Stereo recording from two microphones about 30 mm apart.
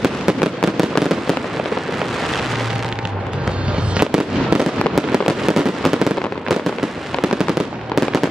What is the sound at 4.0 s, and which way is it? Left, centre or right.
Fireworks, right.